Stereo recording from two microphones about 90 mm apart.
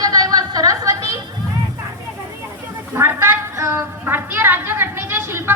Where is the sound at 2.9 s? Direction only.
25° right (ahead or behind).